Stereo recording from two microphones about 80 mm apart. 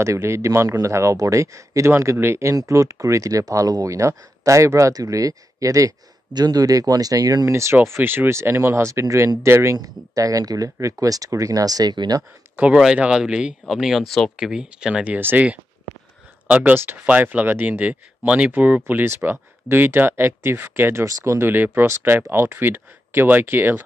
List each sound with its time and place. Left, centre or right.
0.0 s speech: right
2.5 s speech: right
9.8 s speech: right
12.7 s speech: centre
14.3 s speech: centre
15.1 s speech: right
16.4 s speech: centre